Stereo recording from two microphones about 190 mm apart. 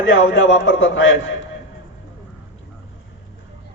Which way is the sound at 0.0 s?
80° left.